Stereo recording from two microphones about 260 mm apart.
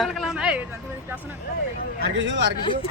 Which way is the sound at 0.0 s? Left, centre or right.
Centre.